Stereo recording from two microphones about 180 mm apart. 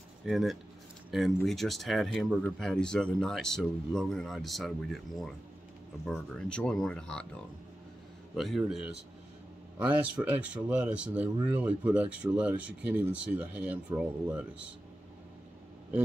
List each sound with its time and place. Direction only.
0.2 s speech: centre (ahead or behind)
8.4 s speech: centre (ahead or behind)